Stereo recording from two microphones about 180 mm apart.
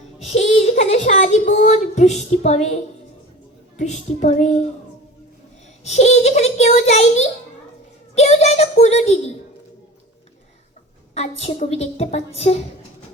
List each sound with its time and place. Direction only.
0.3 s speech: 40° left (ahead or behind)
3.8 s a woman's voice: 40° left (ahead or behind)
5.8 s a woman's voice: 40° left (ahead or behind)
11.1 s a woman's voice: 35° left (ahead or behind)